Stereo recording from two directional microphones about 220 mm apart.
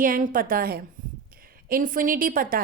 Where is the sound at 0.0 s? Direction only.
40° right (ahead or behind).